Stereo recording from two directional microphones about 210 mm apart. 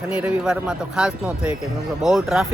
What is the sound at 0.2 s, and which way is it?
A man's voice, 5° right (ahead or behind).